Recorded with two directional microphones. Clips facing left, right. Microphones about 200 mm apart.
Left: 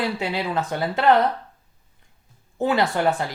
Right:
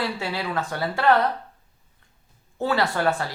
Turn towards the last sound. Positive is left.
turn(degrees=20)  # may be behind; listen again after turning